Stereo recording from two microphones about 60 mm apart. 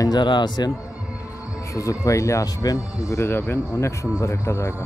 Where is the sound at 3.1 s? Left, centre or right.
Left.